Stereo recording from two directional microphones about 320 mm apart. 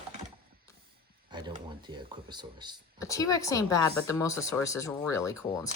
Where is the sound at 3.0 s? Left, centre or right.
Centre.